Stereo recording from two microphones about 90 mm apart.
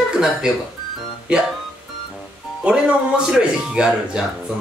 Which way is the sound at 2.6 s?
15° right (ahead or behind).